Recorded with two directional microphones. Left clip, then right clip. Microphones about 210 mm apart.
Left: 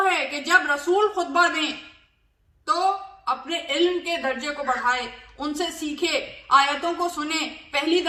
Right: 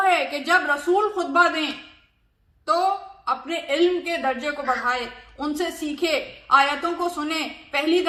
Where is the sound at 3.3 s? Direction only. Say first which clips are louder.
Right 1 dB; 10° left (ahead or behind).